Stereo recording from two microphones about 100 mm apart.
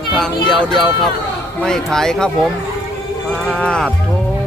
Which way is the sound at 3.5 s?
10° left (ahead or behind).